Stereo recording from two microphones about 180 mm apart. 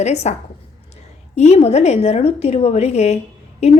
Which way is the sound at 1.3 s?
35° left (ahead or behind).